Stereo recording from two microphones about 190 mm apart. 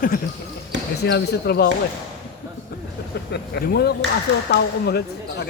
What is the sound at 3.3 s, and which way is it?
Speech, 60° left (ahead or behind).